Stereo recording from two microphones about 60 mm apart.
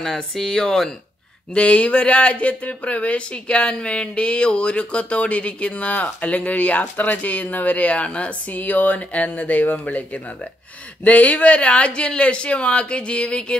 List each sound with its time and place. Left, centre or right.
0.0 s speech: centre